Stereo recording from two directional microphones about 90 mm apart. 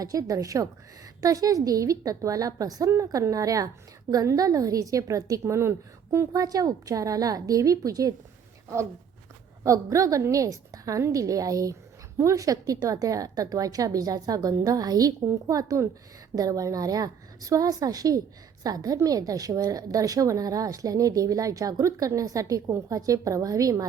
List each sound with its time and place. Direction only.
0.0 s a woman's voice: 40° right (ahead or behind)
6.3 s a woman's voice: 45° right (ahead or behind)
9.6 s a woman's voice: 40° right (ahead or behind)